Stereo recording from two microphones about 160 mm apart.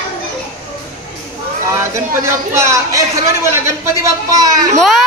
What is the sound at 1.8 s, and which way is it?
A man's voice, 15° right (ahead or behind).